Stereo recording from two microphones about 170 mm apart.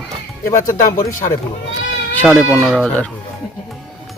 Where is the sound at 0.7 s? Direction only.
50° left (ahead or behind).